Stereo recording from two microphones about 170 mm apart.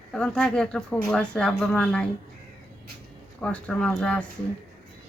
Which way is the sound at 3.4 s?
5° left (ahead or behind).